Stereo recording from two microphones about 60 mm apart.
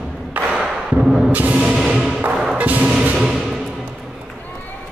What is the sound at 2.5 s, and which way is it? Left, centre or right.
Music, right.